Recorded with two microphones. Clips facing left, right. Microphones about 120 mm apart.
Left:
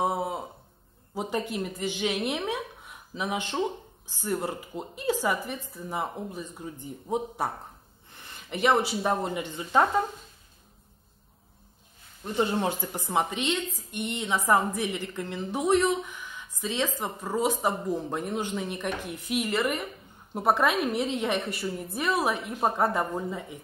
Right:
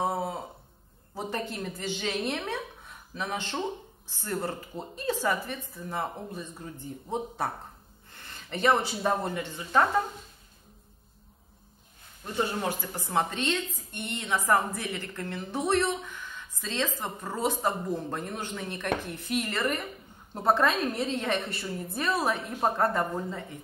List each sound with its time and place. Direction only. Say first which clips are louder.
0.0 s a sound: left 2 dB; 15° left (ahead or behind)
1.1 s a woman's voice: left 3 dB; 15° left (ahead or behind)
12.4 s a woman's voice: left 3 dB; 20° left (ahead or behind)